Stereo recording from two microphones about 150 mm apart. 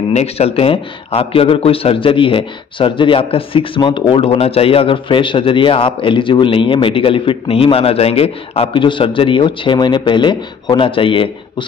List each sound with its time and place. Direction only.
0.1 s a man's voice: 45° left (ahead or behind)